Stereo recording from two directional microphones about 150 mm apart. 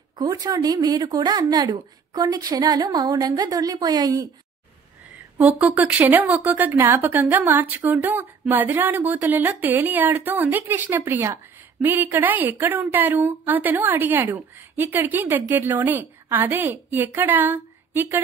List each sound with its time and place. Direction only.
0.2 s speech: 25° right (ahead or behind)
5.4 s a woman's voice: 10° right (ahead or behind)